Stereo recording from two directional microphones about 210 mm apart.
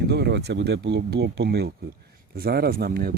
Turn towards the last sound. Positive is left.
turn(degrees=-45)  # may be behind; listen again after turning